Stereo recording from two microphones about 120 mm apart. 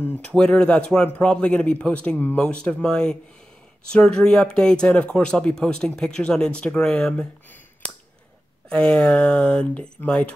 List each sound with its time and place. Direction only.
0.0 s speech: 10° left (ahead or behind)
8.6 s speech: 5° left (ahead or behind)